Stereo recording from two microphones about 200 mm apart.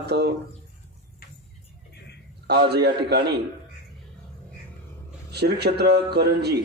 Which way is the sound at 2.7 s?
55° right (ahead or behind).